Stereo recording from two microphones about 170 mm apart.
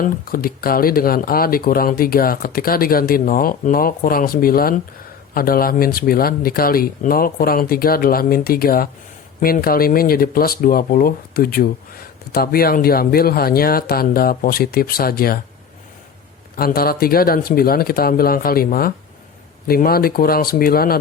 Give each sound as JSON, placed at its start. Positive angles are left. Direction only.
{"t": 0.0, "sound": "speech", "side_deg": 55}
{"t": 16.6, "sound": "speech", "side_deg": 60}